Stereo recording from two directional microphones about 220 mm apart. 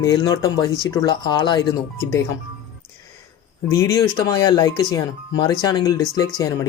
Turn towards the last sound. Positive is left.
turn(degrees=15)  # may be behind; listen again after turning